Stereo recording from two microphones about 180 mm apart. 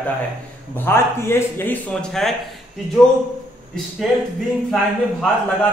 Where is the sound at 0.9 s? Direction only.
15° left (ahead or behind).